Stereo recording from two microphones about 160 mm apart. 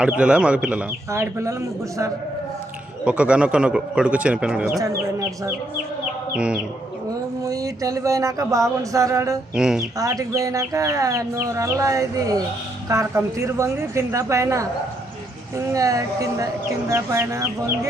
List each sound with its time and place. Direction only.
0.0 s a man's voice: 5° right (ahead or behind)
3.0 s a man's voice: 5° right (ahead or behind)
6.3 s a man's voice: 5° right (ahead or behind)
7.4 s a sound: 20° right (ahead or behind)
8.8 s speech: 20° right (ahead or behind)
9.6 s speech: 5° right (ahead or behind)
10.0 s speech: 20° right (ahead or behind)